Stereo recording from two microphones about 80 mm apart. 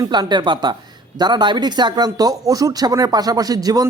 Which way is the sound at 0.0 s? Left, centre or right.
Right.